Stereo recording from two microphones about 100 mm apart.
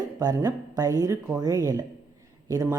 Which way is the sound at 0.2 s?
40° right (ahead or behind).